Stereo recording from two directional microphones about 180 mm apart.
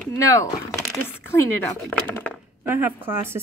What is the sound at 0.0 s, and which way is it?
Speech, 15° left (ahead or behind).